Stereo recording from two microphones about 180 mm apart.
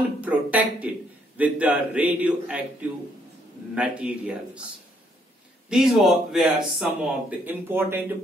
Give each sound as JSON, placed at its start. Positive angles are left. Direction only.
{"t": 0.2, "sound": "a man's voice", "side_deg": -10}
{"t": 5.7, "sound": "speech", "side_deg": 0}